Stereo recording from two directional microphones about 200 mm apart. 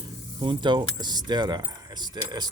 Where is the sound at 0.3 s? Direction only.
25° right (ahead or behind).